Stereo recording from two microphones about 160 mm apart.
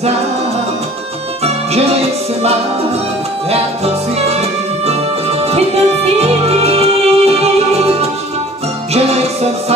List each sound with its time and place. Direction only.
1.4 s music: 40° right (ahead or behind)